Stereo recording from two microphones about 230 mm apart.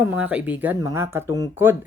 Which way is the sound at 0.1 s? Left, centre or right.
Centre.